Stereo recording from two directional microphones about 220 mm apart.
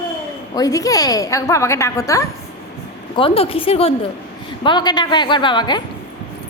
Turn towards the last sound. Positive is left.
turn(degrees=20)  # may be behind; listen again after turning